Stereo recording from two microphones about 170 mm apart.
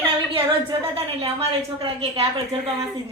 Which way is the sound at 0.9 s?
35° right (ahead or behind).